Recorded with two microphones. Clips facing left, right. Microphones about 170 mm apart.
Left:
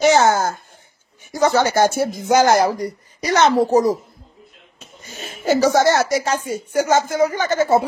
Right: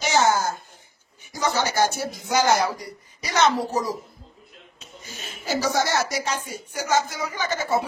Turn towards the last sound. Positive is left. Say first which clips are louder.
# left 8 dB
turn(degrees=55)  # may be behind; listen again after turning